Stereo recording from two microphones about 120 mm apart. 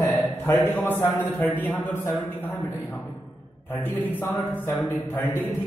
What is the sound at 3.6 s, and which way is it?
A man's voice, 20° left (ahead or behind).